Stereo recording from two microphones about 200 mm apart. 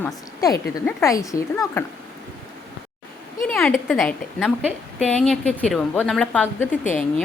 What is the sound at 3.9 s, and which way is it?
A woman's voice, centre (ahead or behind).